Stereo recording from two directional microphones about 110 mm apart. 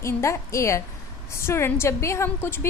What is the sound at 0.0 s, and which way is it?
A woman's voice, 25° left (ahead or behind).